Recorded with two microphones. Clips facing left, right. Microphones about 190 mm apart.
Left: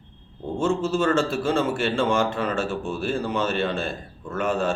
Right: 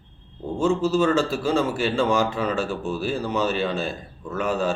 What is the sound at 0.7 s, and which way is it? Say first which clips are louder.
A man's voice: right 2 dB; centre (ahead or behind).